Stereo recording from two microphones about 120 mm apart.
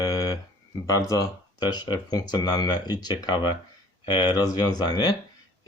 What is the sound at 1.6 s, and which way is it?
Speech, 35° left (ahead or behind).